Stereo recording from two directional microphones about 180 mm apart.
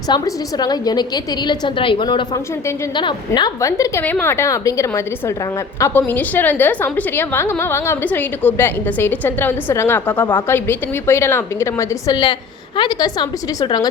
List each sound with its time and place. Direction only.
0.1 s a woman's voice: 20° left (ahead or behind)
10.2 s a woman's voice: 25° left (ahead or behind)